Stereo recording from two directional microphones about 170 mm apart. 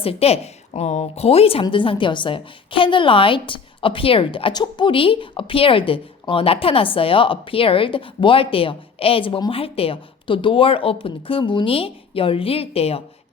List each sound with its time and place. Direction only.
0.0 s a woman's voice: 35° left (ahead or behind)